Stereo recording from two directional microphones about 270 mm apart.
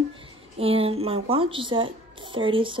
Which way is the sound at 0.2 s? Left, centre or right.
Right.